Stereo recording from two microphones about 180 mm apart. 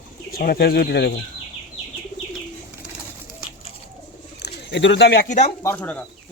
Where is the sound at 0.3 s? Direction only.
55° left (ahead or behind).